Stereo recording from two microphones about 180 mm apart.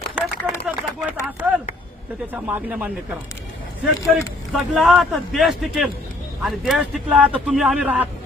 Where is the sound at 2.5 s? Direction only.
10° right (ahead or behind).